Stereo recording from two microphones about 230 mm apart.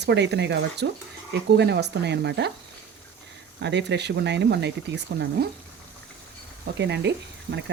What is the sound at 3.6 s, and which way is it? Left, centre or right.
Speech, right.